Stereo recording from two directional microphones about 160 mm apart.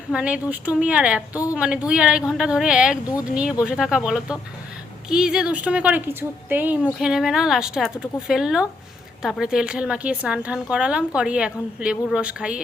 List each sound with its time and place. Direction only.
0.1 s a woman's voice: 5° right (ahead or behind)
1.3 s speech: 20° left (ahead or behind)
1.5 s a woman's voice: 5° right (ahead or behind)